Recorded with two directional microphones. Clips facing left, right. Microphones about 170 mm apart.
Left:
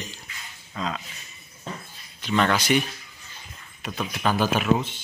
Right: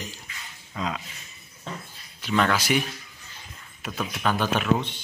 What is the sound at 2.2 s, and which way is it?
Speech, 5° right (ahead or behind).